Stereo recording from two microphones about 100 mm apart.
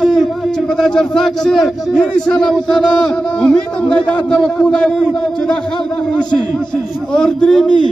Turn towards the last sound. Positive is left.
turn(degrees=5)  # may be behind; listen again after turning